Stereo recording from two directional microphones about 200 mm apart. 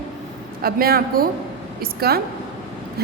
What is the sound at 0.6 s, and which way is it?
A woman's voice, 50° right (ahead or behind).